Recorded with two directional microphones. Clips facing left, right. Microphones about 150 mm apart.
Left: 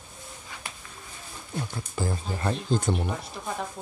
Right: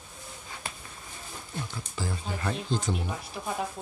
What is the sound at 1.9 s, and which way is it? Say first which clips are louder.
Speech: left 4 dB; 45° left (ahead or behind).